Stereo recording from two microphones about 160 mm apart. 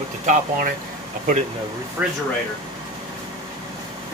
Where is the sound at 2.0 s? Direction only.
10° right (ahead or behind).